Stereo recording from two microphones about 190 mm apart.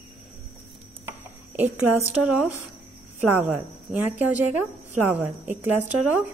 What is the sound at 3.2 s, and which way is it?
Speech, 10° right (ahead or behind).